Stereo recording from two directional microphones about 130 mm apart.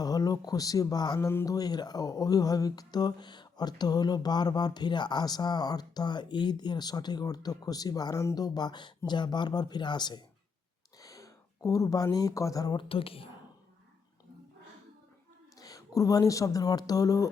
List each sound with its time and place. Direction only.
0.0 s speech: 30° left (ahead or behind)
1.3 s speech: 20° left (ahead or behind)
1.5 s speech: 30° left (ahead or behind)
12.9 s a woman's voice: 45° left (ahead or behind)
15.5 s speech: 25° left (ahead or behind)